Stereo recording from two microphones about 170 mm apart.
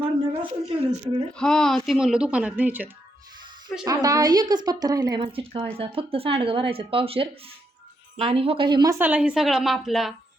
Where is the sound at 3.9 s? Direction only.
20° right (ahead or behind).